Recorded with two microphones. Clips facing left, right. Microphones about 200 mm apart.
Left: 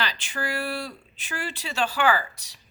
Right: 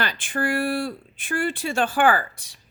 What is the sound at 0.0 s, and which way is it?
Speech, 50° right (ahead or behind).